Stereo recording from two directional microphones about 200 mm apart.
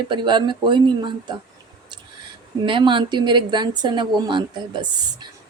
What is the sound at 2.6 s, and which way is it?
A woman's voice, 25° right (ahead or behind).